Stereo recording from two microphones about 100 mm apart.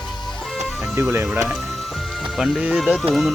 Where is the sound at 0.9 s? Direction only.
25° right (ahead or behind).